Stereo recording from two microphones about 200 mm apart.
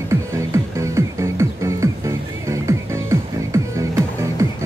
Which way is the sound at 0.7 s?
15° right (ahead or behind).